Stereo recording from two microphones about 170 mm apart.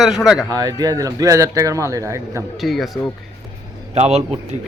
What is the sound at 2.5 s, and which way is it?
Speech, centre (ahead or behind).